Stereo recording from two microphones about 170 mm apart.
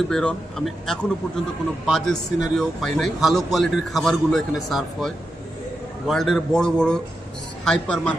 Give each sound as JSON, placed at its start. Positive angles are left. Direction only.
{"t": 0.1, "sound": "a man's voice", "side_deg": 5}